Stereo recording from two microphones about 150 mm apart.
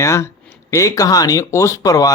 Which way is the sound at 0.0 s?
20° left (ahead or behind).